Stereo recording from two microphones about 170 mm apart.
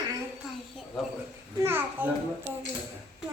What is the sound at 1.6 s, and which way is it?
Speech, 15° right (ahead or behind).